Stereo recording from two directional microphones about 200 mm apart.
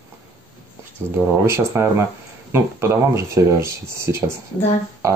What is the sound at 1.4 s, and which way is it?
Speech, 15° right (ahead or behind).